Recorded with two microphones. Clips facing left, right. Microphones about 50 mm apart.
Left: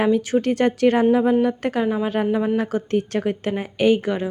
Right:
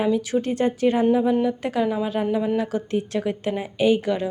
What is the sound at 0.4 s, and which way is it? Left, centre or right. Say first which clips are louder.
A woman's voice: left 3 dB; left.